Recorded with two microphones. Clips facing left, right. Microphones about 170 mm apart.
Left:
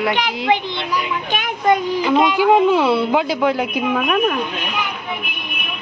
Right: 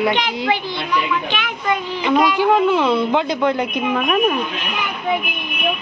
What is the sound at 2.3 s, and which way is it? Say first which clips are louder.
A woman's voice: left 2 dB; 15° left (ahead or behind).